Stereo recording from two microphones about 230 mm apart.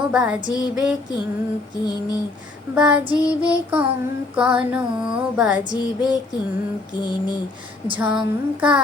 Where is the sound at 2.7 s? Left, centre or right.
Centre.